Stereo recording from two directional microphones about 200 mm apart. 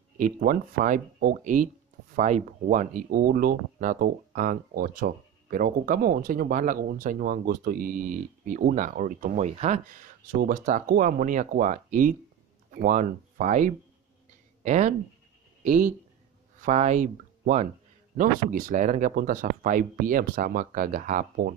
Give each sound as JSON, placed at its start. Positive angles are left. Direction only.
{"t": 0.2, "sound": "a man's voice", "side_deg": -45}